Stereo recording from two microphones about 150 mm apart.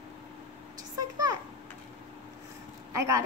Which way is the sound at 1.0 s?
25° right (ahead or behind).